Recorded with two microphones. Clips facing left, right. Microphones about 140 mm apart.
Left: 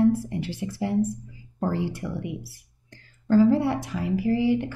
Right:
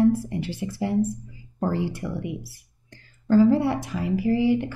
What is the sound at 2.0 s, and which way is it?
Speech, 25° right (ahead or behind).